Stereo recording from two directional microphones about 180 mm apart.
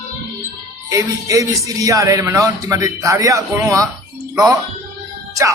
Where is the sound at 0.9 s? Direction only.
20° right (ahead or behind).